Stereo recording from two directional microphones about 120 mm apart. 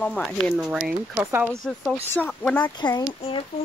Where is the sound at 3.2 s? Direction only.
50° left (ahead or behind).